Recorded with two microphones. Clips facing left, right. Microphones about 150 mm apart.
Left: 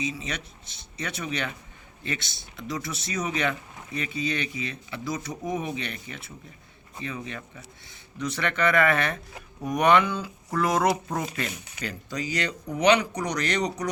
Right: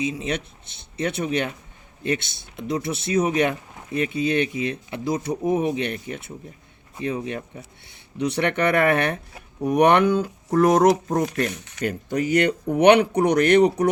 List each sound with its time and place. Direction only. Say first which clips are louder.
0.0 s speech: right 6 dB; 55° right (ahead or behind)
11.6 s speech: right 9 dB; 55° right (ahead or behind)